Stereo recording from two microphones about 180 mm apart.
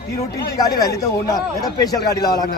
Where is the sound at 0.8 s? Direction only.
15° left (ahead or behind).